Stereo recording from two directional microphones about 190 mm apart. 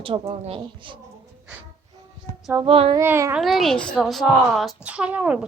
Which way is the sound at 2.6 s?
30° right (ahead or behind).